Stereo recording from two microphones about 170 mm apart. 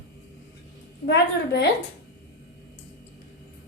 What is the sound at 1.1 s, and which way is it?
Speech, 85° left.